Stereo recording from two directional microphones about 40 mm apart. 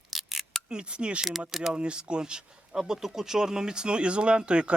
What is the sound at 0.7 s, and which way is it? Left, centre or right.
Speech, right.